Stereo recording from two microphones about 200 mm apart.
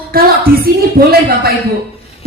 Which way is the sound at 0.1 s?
50° right (ahead or behind).